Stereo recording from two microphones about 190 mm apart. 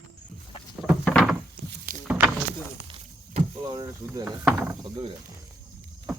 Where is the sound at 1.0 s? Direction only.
Centre (ahead or behind).